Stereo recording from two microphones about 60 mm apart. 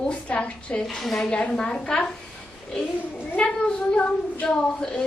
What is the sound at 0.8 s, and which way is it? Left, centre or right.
A woman's voice, centre.